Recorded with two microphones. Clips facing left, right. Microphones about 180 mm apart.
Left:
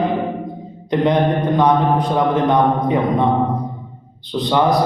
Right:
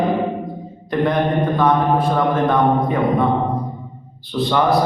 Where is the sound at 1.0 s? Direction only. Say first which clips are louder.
Left 1 dB; 20° left (ahead or behind).